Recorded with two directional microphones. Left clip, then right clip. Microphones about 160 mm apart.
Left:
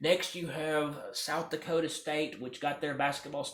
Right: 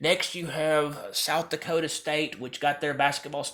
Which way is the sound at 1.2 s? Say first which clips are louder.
Right 7 dB; 40° right (ahead or behind).